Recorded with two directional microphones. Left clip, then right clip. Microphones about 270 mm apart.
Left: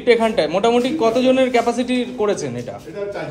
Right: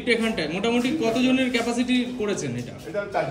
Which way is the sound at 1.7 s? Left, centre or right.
Left.